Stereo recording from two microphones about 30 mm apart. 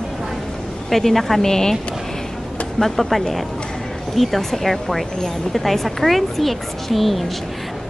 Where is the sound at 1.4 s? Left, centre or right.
Centre.